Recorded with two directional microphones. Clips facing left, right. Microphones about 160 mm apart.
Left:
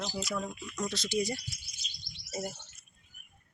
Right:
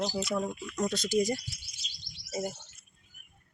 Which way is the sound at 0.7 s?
50° right (ahead or behind).